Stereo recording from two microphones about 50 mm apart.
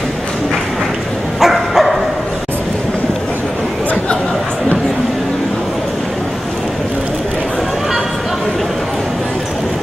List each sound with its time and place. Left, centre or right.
1.4 s dog: centre